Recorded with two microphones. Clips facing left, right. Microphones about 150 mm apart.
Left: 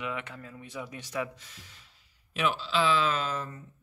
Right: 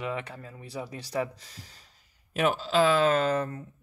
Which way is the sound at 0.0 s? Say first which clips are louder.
Right 3 dB; 35° right (ahead or behind).